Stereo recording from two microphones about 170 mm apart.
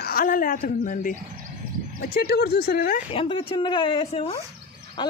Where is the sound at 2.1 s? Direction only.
65° left (ahead or behind).